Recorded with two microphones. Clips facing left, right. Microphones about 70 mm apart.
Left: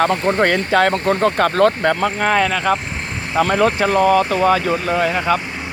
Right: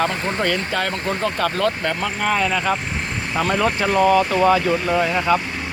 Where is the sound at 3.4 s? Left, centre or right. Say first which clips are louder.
Left 4 dB; left.